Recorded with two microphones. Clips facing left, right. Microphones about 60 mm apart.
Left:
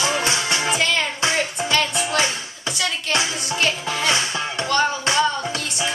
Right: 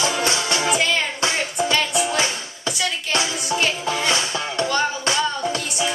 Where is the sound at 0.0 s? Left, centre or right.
Left.